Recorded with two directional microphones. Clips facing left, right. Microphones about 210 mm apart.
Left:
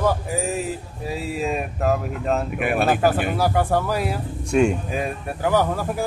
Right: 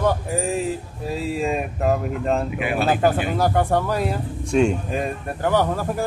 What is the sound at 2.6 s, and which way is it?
Speech, 55° left (ahead or behind).